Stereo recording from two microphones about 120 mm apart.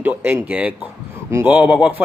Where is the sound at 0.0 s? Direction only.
15° right (ahead or behind).